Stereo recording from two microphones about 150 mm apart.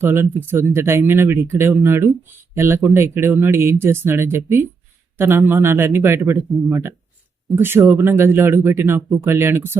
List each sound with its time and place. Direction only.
0.0 s speech: 15° right (ahead or behind)